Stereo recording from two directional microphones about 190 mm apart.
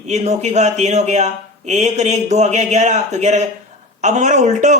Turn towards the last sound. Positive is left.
turn(degrees=-40)  # may be behind; listen again after turning